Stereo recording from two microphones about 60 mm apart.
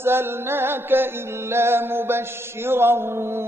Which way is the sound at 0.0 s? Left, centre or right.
Right.